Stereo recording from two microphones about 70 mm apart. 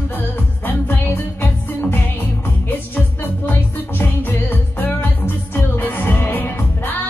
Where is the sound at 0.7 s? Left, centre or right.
Left.